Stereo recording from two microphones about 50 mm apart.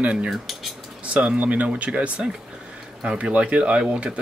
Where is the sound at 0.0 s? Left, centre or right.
Right.